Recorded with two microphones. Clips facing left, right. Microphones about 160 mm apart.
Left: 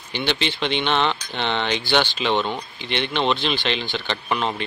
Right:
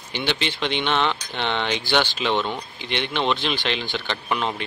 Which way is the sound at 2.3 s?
15° left (ahead or behind).